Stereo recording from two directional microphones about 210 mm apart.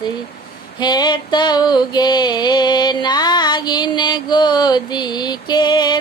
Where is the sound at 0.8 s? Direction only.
20° left (ahead or behind).